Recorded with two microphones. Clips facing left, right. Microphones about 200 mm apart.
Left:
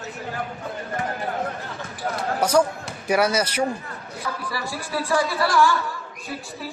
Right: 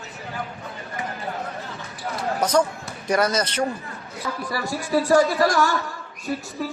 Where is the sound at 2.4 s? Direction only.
10° left (ahead or behind).